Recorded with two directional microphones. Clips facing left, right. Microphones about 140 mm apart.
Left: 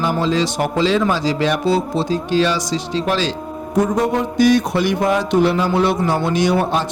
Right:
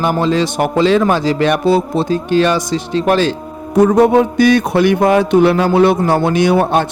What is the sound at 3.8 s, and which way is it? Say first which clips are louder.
Music: right 8 dB; 65° right (ahead or behind).